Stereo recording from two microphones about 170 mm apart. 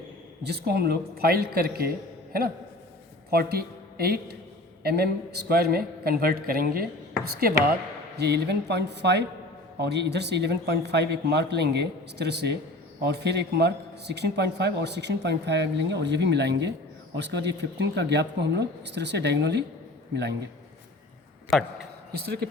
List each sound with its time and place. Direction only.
0.4 s a man's voice: 70° right (ahead or behind)
3.2 s a man's voice: 65° right (ahead or behind)
8.2 s a man's voice: 75° right (ahead or behind)
21.5 s a man's voice: centre (ahead or behind)
22.1 s speech: 70° right (ahead or behind)